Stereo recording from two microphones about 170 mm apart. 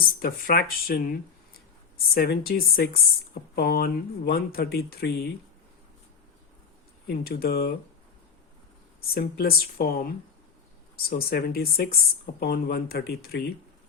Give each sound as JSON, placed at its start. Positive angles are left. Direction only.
{"t": 0.0, "sound": "speech", "side_deg": 60}
{"t": 7.1, "sound": "speech", "side_deg": 65}
{"t": 9.0, "sound": "speech", "side_deg": 60}